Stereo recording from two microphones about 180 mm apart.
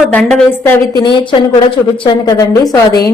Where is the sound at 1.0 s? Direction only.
25° left (ahead or behind).